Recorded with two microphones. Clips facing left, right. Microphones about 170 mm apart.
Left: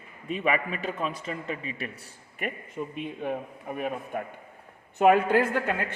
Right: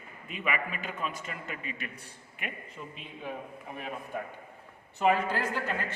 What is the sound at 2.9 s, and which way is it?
Speech, 55° left (ahead or behind).